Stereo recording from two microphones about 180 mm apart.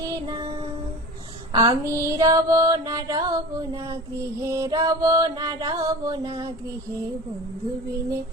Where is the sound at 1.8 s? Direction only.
15° right (ahead or behind).